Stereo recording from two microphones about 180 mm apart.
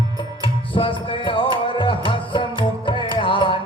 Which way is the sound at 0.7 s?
30° left (ahead or behind).